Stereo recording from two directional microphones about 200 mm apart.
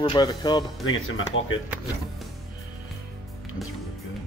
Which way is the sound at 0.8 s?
85° left.